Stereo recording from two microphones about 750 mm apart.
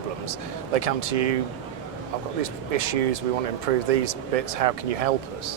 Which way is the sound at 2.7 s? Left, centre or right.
Right.